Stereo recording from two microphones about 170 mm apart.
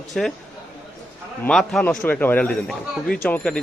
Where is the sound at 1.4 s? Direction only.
Centre (ahead or behind).